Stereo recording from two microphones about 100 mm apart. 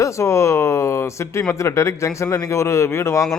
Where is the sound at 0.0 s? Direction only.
30° left (ahead or behind).